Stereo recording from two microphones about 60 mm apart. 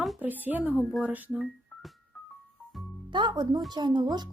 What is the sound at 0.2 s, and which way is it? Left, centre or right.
Speech, right.